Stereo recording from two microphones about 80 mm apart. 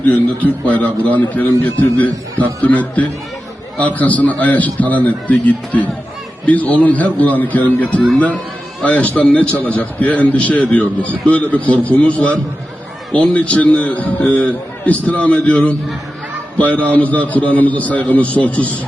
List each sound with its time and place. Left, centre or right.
0.1 s a man's voice: centre